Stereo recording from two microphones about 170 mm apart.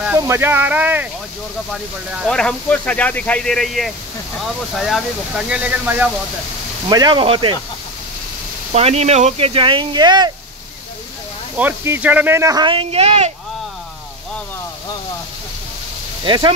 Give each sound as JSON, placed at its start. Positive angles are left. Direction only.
{"t": 0.0, "sound": "speech", "side_deg": -15}
{"t": 1.7, "sound": "speech", "side_deg": 0}
{"t": 6.9, "sound": "speech", "side_deg": -25}
{"t": 8.7, "sound": "speech", "side_deg": -40}
{"t": 11.5, "sound": "speech", "side_deg": -10}
{"t": 16.3, "sound": "speech", "side_deg": -30}